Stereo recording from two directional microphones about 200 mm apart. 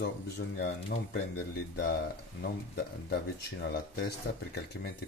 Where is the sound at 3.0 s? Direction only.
55° left (ahead or behind).